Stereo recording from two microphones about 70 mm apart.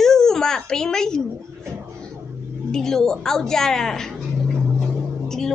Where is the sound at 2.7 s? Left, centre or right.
Centre.